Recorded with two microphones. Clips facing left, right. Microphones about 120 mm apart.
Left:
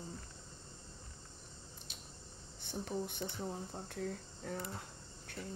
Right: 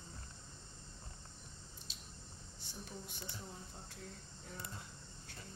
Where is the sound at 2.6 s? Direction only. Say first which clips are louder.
Left 11 dB; 55° left (ahead or behind).